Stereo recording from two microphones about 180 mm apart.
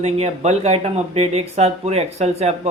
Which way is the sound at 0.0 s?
35° right (ahead or behind).